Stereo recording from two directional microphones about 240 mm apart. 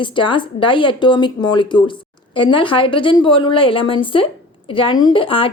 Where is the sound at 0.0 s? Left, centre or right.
Centre.